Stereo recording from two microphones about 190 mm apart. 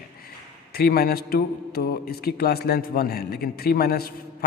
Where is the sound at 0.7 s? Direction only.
55° left (ahead or behind).